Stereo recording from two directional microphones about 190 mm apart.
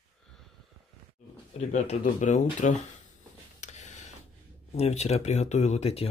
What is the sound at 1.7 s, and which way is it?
Speech, 40° left (ahead or behind).